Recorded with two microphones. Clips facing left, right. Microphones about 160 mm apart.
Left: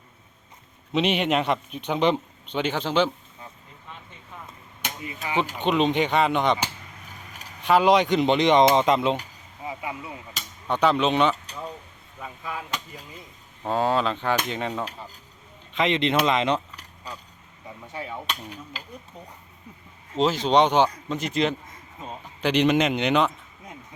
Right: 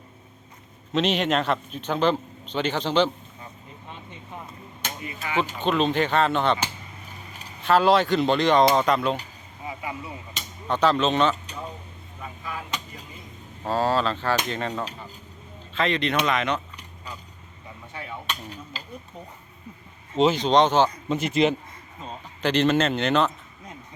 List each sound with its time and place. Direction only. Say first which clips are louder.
0.9 s speech: even; 10° left (ahead or behind)
4.8 s speech: left 1 dB; 15° left (ahead or behind)
9.6 s a sound: left 1 dB; 15° left (ahead or behind)
10.3 s speech: even; 10° left (ahead or behind)
13.7 s speech: even; 15° left (ahead or behind)
15.7 s speech: left 2 dB; 20° left (ahead or behind)
18.3 s speech: even; 10° left (ahead or behind)
20.1 s speech: right 1 dB; centre (ahead or behind)
21.1 s speech: right 3 dB; 5° right (ahead or behind)
22.0 s a man's voice: even; 10° left (ahead or behind)